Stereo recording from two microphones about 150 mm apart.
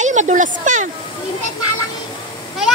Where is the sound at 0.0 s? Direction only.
55° right (ahead or behind).